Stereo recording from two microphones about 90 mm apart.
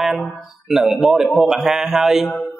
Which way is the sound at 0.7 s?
Centre (ahead or behind).